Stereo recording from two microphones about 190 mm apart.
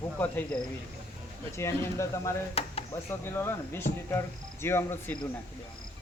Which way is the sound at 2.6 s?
30° left (ahead or behind).